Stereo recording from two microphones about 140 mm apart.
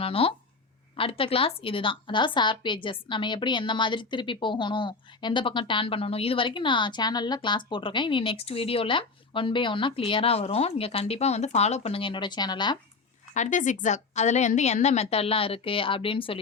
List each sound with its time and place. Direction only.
0.0 s a woman's voice: 40° left (ahead or behind)
13.3 s a woman's voice: 60° left (ahead or behind); by 16.4 s 40° left (ahead or behind)